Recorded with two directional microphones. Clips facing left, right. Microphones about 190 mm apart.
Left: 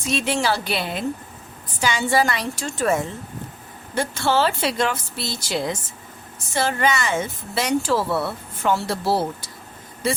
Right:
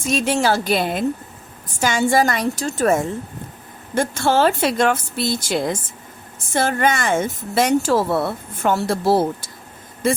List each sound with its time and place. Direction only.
0.0 s a woman's voice: 45° right (ahead or behind)